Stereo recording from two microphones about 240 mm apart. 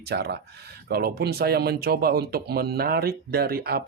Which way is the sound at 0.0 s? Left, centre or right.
Right.